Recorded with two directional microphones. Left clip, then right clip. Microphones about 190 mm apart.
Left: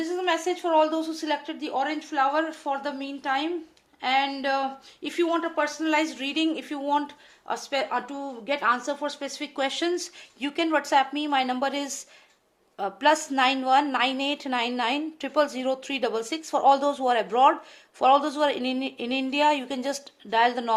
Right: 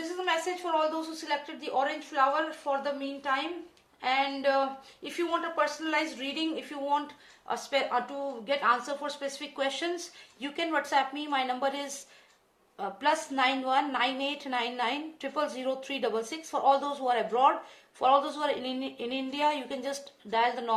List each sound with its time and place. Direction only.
0.3 s a woman's voice: 50° left (ahead or behind)